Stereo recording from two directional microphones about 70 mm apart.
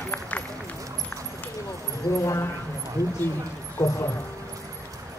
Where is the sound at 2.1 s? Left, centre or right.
Left.